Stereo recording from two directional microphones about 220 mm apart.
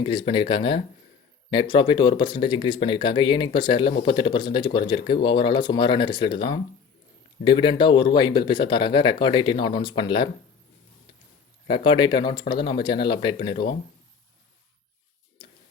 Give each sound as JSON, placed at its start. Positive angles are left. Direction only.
{"t": 0.0, "sound": "speech", "side_deg": 20}
{"t": 11.7, "sound": "speech", "side_deg": 20}